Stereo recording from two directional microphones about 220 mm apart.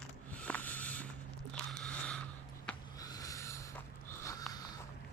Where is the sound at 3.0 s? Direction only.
15° left (ahead or behind).